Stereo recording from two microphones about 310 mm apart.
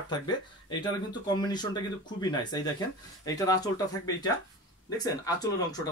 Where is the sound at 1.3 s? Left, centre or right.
Centre.